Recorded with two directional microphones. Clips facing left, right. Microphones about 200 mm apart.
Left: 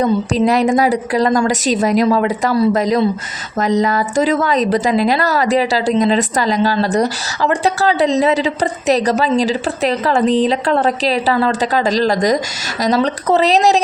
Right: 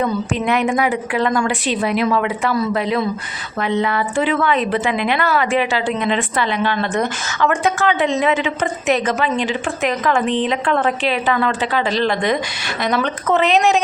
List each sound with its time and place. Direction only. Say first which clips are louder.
0.0 s a woman's voice: left 5 dB; 35° left (ahead or behind)